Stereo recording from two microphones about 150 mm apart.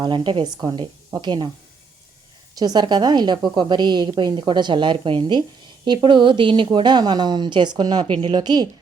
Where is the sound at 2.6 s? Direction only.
30° right (ahead or behind).